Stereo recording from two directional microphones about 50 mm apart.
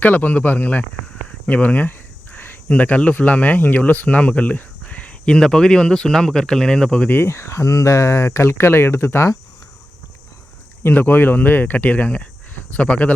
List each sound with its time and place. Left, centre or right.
0.0 s speech: left
1.5 s a sound: left
2.6 s speech: left
7.3 s speech: left
10.8 s speech: left